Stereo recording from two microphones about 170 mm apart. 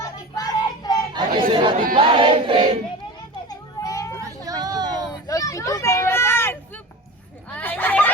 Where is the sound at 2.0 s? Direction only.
30° right (ahead or behind).